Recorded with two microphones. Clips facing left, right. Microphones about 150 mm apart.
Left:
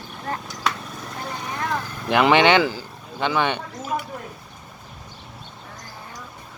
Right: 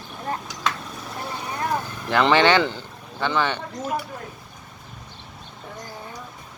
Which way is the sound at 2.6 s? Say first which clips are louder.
Left 2 dB; 5° left (ahead or behind).